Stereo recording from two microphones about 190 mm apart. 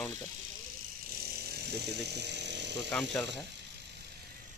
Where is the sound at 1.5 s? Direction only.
60° right (ahead or behind).